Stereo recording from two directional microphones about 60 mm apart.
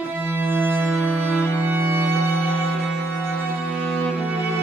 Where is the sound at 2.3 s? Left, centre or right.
Left.